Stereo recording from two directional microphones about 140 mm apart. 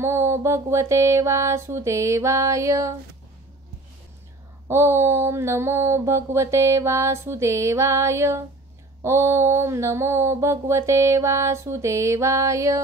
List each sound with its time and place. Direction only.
0.0 s mantra: 20° right (ahead or behind)
4.6 s mantra: 20° right (ahead or behind)